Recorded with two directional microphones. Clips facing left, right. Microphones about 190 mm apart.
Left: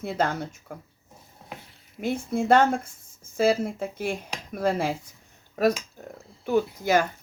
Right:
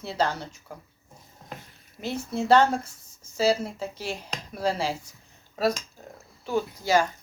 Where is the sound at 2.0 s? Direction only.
50° left (ahead or behind).